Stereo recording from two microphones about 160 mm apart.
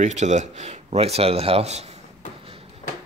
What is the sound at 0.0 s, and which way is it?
Speech, 45° right (ahead or behind).